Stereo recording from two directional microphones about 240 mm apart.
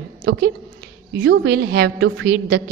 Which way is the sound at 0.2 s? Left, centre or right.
Right.